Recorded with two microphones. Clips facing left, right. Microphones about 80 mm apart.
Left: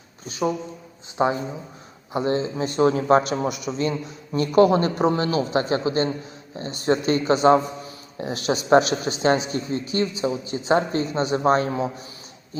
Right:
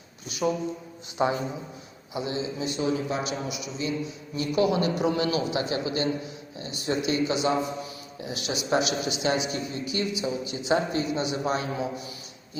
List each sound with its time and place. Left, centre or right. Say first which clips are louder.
0.3 s a man's voice: left 2 dB; left
2.1 s a man's voice: left 7 dB; left